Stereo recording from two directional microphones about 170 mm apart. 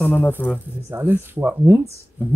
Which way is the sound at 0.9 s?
10° right (ahead or behind).